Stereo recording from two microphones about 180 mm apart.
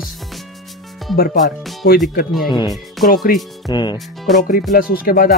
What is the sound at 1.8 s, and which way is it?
Speech, 55° left (ahead or behind).